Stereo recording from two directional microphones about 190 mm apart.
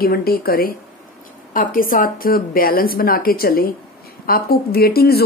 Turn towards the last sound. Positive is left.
turn(degrees=55)  # may be behind; listen again after turning